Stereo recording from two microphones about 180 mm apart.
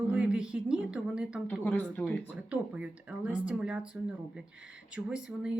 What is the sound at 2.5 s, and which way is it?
Speech, 5° right (ahead or behind).